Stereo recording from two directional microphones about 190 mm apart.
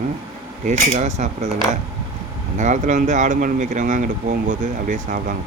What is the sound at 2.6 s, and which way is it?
Speech, 40° right (ahead or behind).